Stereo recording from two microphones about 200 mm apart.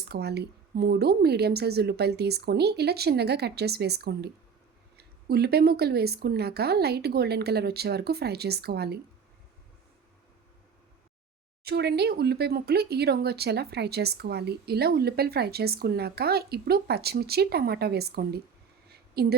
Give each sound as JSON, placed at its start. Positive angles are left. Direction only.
{"t": 0.1, "sound": "a woman's voice", "side_deg": -55}
{"t": 11.6, "sound": "speech", "side_deg": -55}
{"t": 18.9, "sound": "a sound", "side_deg": -50}